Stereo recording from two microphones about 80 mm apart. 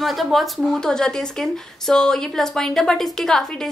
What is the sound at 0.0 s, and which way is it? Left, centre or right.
A woman's voice, centre.